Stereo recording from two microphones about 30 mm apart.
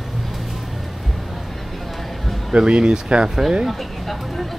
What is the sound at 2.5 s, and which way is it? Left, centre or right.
Speech, right.